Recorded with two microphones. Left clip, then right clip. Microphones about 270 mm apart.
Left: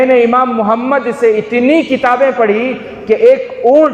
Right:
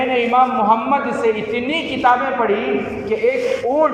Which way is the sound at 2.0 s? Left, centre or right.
Left.